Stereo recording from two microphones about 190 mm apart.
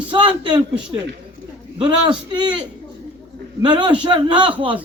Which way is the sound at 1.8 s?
25° right (ahead or behind).